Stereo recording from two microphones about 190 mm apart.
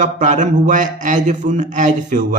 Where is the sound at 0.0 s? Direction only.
40° right (ahead or behind).